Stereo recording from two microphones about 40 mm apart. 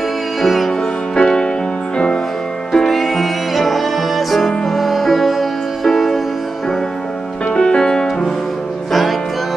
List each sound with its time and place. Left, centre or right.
0.4 s music: centre
1.1 s music: left
2.7 s music: centre
7.5 s music: centre